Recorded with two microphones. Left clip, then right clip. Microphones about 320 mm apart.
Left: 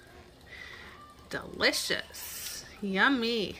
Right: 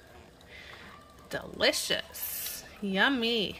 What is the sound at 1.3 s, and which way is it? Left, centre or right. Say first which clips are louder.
Speech: right 1 dB; centre.